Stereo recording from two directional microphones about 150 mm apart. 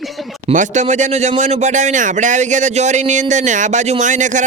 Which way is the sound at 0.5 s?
55° right (ahead or behind).